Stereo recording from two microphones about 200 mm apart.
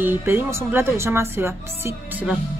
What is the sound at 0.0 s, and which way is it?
Speech, 10° right (ahead or behind).